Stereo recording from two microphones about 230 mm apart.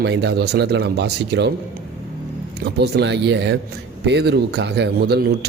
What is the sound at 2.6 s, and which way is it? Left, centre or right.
Speech, right.